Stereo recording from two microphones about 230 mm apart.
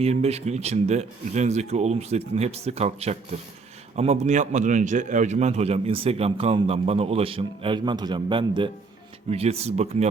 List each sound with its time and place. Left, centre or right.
0.0 s a man's voice: right